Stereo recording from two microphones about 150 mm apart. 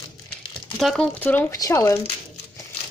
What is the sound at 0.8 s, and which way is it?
Speech, centre (ahead or behind).